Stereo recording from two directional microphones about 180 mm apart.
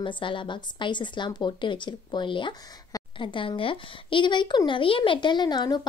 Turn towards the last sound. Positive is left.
turn(degrees=25)  # may be behind; listen again after turning